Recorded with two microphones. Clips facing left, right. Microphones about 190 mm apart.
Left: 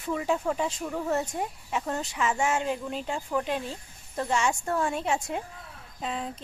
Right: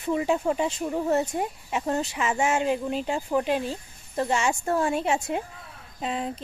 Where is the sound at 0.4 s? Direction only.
30° right (ahead or behind).